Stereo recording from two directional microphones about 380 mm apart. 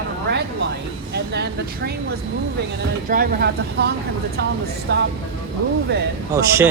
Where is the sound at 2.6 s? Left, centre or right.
Right.